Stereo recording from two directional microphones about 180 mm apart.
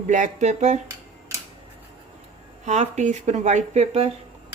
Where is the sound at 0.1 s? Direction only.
40° right (ahead or behind).